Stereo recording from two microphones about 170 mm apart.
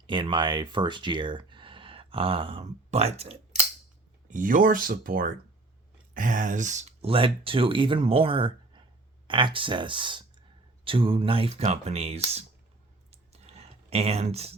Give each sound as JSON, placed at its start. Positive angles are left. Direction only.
{"t": 0.1, "sound": "speech", "side_deg": -30}
{"t": 4.3, "sound": "speech", "side_deg": -50}
{"t": 13.1, "sound": "clicking", "side_deg": -40}